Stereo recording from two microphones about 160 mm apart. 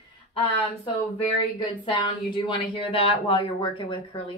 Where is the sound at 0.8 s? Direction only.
35° left (ahead or behind).